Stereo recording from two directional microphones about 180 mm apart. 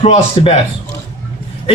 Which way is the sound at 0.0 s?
35° left (ahead or behind).